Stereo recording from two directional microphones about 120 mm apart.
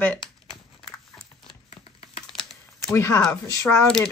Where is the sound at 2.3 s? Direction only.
5° left (ahead or behind).